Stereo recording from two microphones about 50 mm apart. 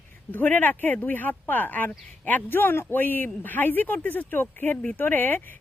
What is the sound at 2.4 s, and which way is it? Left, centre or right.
Speech, left.